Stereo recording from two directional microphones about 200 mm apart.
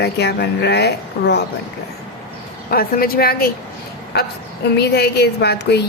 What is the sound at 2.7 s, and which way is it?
Speech, 50° left (ahead or behind).